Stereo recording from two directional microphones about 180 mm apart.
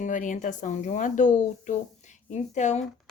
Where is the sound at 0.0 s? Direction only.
45° left (ahead or behind).